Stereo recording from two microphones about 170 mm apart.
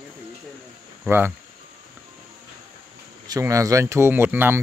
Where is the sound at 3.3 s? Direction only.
20° right (ahead or behind).